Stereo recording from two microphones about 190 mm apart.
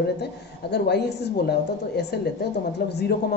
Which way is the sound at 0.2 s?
60° left (ahead or behind).